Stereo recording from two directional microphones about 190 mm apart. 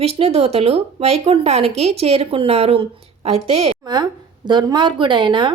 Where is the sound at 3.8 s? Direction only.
20° right (ahead or behind).